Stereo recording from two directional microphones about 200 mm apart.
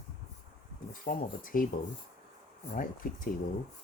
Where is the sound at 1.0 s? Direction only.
45° left (ahead or behind).